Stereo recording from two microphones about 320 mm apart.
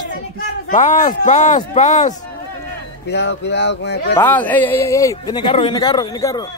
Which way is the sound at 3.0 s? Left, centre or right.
Left.